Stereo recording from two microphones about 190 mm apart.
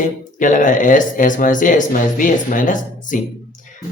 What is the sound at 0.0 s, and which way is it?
Speech, 45° left (ahead or behind).